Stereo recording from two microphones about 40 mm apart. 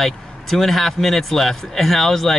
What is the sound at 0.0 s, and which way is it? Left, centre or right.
A man's voice, centre.